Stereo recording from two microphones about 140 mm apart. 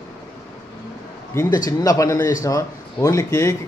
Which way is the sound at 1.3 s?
20° left (ahead or behind).